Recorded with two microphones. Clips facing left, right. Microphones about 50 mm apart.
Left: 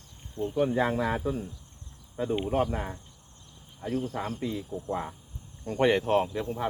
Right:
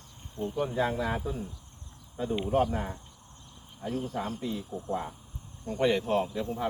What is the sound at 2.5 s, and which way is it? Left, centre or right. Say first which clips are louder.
Speech: right 5 dB; centre.